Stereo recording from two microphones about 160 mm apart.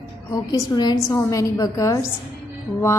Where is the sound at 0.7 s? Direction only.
25° left (ahead or behind).